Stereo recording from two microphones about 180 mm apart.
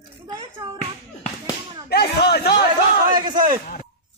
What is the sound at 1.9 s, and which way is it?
Speech, 60° left (ahead or behind).